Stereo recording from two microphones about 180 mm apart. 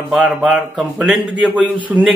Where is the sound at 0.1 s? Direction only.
Centre (ahead or behind).